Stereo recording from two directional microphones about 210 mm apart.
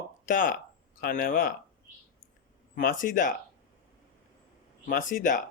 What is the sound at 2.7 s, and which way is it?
Speech, 40° left (ahead or behind).